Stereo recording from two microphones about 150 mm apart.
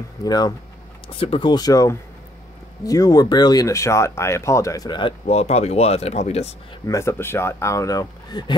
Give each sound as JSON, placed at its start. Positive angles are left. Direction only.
{"t": 0.2, "sound": "speech", "side_deg": 25}
{"t": 1.0, "sound": "speech", "side_deg": 40}
{"t": 5.2, "sound": "speech", "side_deg": 45}
{"t": 6.9, "sound": "speech", "side_deg": 20}